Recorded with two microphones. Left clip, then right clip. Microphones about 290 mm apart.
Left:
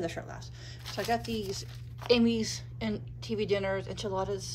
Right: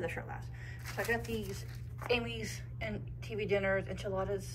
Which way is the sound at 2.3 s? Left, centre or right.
Centre.